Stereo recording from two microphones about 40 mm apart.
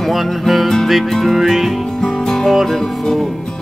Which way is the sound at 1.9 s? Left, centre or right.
Centre.